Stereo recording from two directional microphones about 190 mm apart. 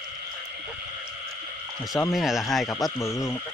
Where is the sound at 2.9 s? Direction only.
15° left (ahead or behind).